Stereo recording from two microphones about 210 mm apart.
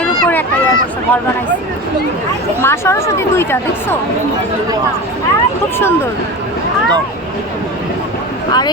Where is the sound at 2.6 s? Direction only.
10° left (ahead or behind).